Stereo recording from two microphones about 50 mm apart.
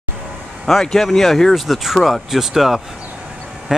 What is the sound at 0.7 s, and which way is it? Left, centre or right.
Speech, centre.